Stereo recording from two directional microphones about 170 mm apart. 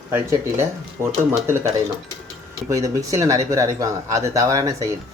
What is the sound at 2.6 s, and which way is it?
Speech, 20° right (ahead or behind).